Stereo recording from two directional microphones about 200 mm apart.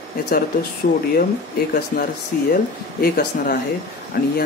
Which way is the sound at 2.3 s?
45° left (ahead or behind).